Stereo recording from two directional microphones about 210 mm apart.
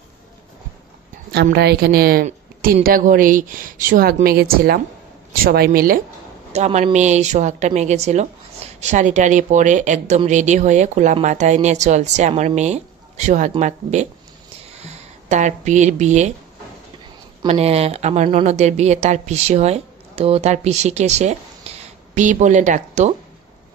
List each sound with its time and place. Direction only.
1.3 s a woman's voice: 50° right (ahead or behind)
6.5 s speech: 35° right (ahead or behind)
17.5 s speech: 30° right (ahead or behind)
21.7 s a sound: 30° right (ahead or behind)
22.1 s speech: 35° right (ahead or behind)